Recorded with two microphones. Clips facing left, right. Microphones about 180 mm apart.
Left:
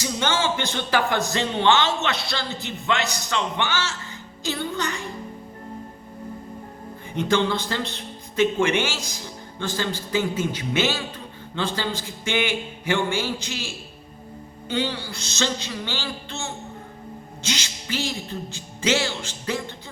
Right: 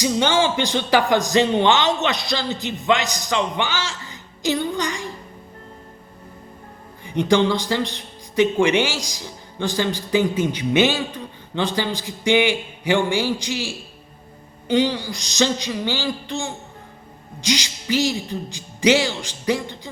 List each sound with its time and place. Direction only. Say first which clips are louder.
0.0 s a man's voice: right 6 dB; 15° right (ahead or behind)
4.4 s music: right 5 dB; 15° right (ahead or behind)
7.1 s a man's voice: right 4 dB; 15° right (ahead or behind)
14.7 s a man's voice: right 7 dB; 15° right (ahead or behind)